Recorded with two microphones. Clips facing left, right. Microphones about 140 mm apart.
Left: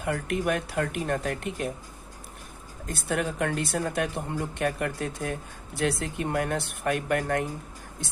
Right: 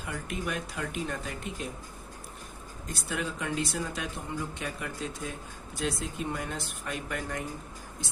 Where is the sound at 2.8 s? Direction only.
55° left (ahead or behind).